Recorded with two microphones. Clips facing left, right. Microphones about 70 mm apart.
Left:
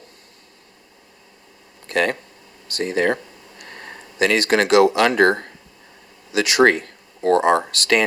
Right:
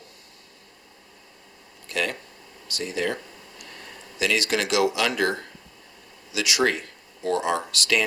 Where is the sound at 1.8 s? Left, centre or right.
Left.